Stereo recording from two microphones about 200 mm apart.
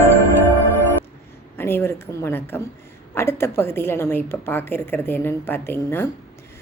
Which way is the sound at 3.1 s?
10° left (ahead or behind).